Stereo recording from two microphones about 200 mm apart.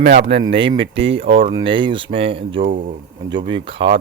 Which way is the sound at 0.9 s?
65° right (ahead or behind).